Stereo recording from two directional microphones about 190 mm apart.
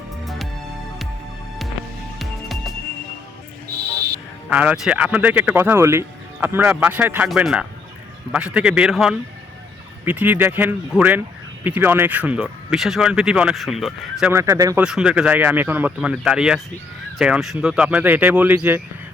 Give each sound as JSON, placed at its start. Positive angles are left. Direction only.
{"t": 2.1, "sound": "music", "side_deg": 0}
{"t": 4.4, "sound": "speech", "side_deg": -5}
{"t": 14.3, "sound": "speech", "side_deg": -15}
{"t": 14.8, "sound": "speech", "side_deg": -5}